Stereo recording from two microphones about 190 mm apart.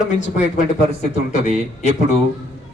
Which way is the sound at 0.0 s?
40° left (ahead or behind).